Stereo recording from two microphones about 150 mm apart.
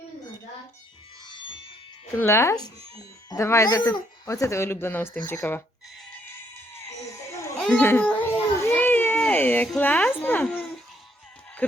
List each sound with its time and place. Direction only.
1.3 s music: 35° left (ahead or behind)
2.1 s speech: 15° left (ahead or behind)
6.7 s music: 20° left (ahead or behind)
7.6 s a child's voice: 10° left (ahead or behind)
8.7 s a sound: 10° left (ahead or behind)